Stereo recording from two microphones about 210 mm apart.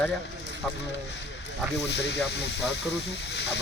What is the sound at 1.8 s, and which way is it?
Speech, 55° left (ahead or behind).